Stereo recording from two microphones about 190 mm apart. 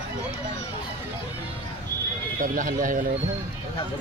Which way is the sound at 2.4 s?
45° right (ahead or behind).